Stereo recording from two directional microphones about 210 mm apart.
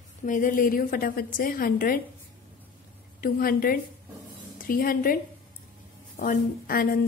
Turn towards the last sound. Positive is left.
turn(degrees=45)  # may be behind; listen again after turning